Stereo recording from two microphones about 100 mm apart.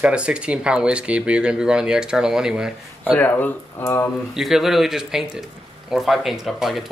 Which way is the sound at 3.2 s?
20° left (ahead or behind).